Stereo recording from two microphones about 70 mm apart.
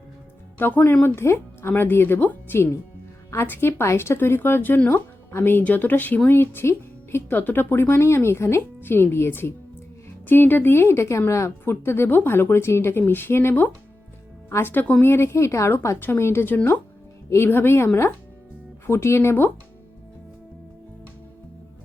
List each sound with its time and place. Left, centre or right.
0.6 s a woman's voice: left
11.7 s a woman's voice: left
16.0 s speech: left